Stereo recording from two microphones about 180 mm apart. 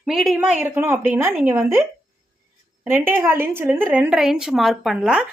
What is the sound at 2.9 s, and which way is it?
A woman's voice, 15° right (ahead or behind).